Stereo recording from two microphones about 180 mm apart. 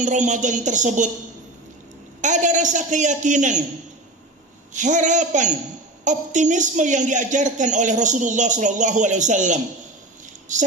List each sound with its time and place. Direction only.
0.0 s a woman's voice: 40° right (ahead or behind)
2.2 s a woman's voice: 40° right (ahead or behind)
4.7 s a woman's voice: 45° right (ahead or behind)